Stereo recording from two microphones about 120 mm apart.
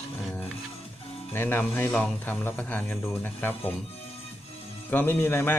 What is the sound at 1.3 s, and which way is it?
Speech, 15° left (ahead or behind).